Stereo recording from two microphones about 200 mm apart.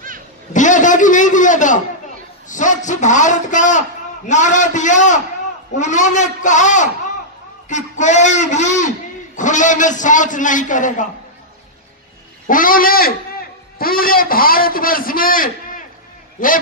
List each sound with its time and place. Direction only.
0.5 s a sound: 40° left (ahead or behind)
2.4 s a man's voice: 40° left (ahead or behind)
12.4 s a man's voice: 45° left (ahead or behind)